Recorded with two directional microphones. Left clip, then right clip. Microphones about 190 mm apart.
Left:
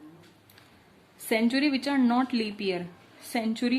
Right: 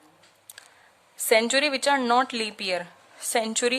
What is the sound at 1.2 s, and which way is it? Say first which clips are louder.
A woman's voice: right 5 dB; 40° right (ahead or behind).